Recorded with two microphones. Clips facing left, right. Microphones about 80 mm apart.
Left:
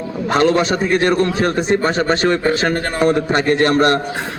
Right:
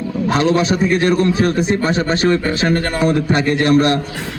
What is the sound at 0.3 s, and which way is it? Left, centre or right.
A man's voice, left.